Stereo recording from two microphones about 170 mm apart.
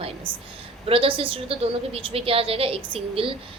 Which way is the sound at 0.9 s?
35° right (ahead or behind).